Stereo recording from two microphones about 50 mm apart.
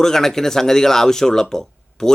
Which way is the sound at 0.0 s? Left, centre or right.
Centre.